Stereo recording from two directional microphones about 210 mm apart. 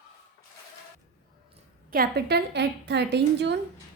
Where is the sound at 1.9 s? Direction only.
45° right (ahead or behind).